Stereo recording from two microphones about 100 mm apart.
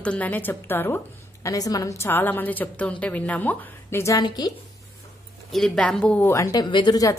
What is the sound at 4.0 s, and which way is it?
Speech, 35° left (ahead or behind).